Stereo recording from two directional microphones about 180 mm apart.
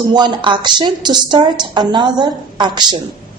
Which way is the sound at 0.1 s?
25° right (ahead or behind).